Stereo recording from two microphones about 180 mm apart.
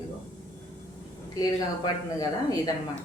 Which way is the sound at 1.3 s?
20° left (ahead or behind).